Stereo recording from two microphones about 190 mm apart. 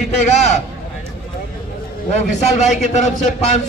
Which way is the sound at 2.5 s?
35° left (ahead or behind).